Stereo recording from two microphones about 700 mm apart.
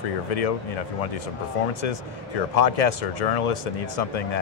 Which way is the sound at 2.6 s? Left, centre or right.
Left.